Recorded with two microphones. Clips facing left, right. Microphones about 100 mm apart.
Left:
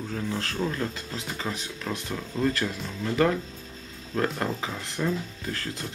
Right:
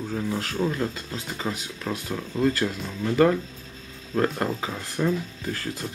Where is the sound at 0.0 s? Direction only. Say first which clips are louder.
Right 3 dB; 10° right (ahead or behind).